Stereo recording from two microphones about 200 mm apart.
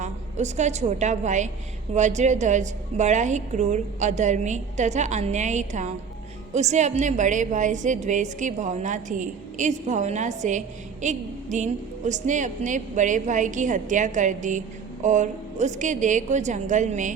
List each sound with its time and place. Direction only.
0.0 s a woman's voice: 35° right (ahead or behind)